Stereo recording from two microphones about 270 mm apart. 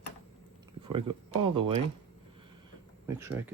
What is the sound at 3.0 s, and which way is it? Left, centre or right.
Speech, centre.